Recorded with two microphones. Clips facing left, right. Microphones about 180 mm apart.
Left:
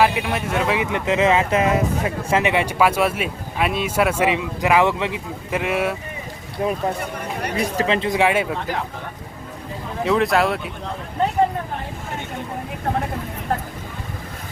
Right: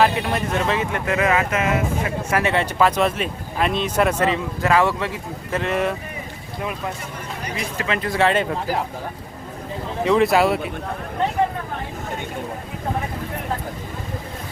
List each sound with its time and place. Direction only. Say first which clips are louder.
0.0 s speech: even; 5° left (ahead or behind)
6.6 s speech: left 6 dB; 35° left (ahead or behind); by 8.5 s 10° left (ahead or behind)
10.0 s speech: right 2 dB; centre (ahead or behind)